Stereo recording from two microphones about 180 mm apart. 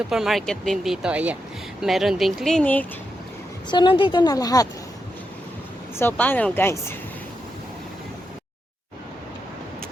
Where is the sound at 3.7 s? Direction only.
25° left (ahead or behind).